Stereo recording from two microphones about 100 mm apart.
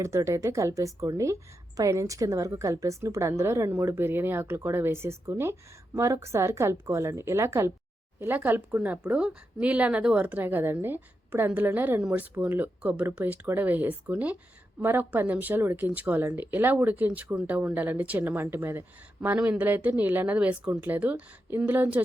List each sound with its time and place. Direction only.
0.0 s a woman's voice: 30° right (ahead or behind)